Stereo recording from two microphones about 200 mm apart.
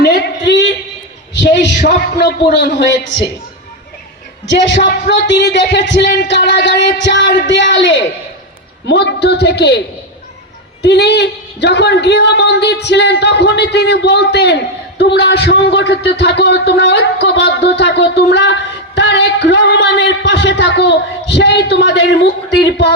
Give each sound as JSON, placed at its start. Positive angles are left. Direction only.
{"t": 0.0, "sound": "a sound", "side_deg": 55}
{"t": 1.3, "sound": "a woman's voice", "side_deg": 60}
{"t": 4.4, "sound": "a woman's voice", "side_deg": 60}
{"t": 10.8, "sound": "a woman's voice", "side_deg": 55}